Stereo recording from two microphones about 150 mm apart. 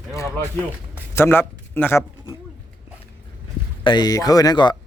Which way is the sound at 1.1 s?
15° left (ahead or behind).